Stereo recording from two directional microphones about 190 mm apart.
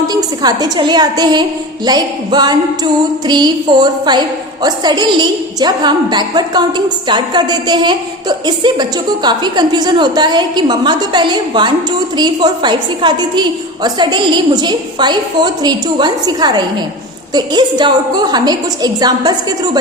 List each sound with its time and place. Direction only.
0.1 s a woman's voice: 20° right (ahead or behind)